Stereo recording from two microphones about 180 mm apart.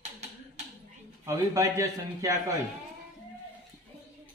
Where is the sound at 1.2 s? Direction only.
15° right (ahead or behind).